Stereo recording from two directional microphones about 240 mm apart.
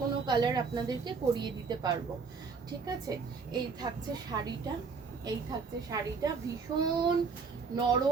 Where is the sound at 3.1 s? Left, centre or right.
Centre.